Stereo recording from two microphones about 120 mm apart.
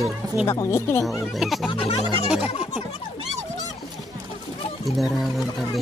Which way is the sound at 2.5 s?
55° left (ahead or behind).